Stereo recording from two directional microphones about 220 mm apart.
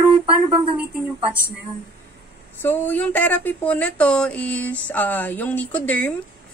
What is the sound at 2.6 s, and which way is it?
Speech, 10° left (ahead or behind).